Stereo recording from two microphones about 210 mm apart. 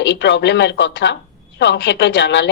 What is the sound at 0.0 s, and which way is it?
A woman's voice, 60° left (ahead or behind).